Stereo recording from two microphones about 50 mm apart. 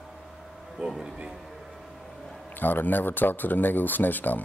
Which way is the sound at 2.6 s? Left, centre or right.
Left.